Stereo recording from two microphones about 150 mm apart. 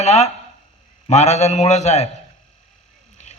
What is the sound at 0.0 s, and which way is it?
A man's voice, 50° left (ahead or behind).